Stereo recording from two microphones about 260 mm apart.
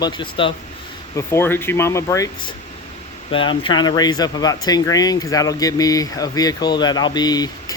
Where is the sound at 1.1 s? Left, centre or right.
Centre.